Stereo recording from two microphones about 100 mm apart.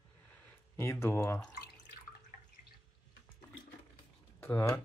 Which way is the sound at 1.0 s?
25° left (ahead or behind).